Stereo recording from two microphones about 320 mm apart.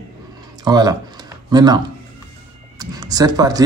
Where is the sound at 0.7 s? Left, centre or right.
Centre.